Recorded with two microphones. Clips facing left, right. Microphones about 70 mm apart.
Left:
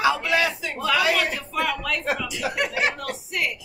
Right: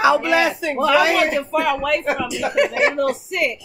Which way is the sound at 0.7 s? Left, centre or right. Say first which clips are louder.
Right 6 dB; right.